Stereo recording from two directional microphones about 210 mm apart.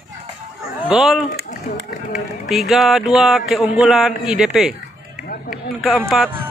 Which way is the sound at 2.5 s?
Centre (ahead or behind).